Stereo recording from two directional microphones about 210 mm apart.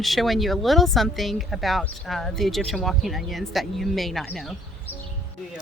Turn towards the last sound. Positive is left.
turn(degrees=0)  # may be behind; listen again after turning